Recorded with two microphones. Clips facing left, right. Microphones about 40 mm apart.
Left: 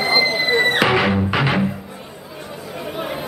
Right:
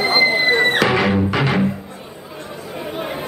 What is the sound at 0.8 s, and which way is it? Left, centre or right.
Music, centre.